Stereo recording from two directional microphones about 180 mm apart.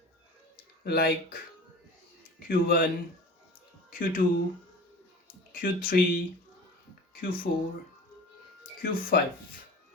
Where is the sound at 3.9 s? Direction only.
50° left (ahead or behind).